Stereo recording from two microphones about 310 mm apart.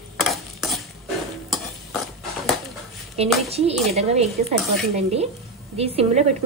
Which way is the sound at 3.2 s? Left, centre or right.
Centre.